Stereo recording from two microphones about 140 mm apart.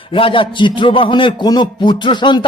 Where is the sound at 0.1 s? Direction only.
40° left (ahead or behind).